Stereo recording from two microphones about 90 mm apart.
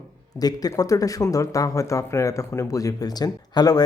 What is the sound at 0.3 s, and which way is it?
Speech, 45° left (ahead or behind).